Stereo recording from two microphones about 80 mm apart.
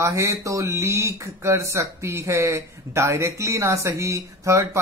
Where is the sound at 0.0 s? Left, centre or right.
Right.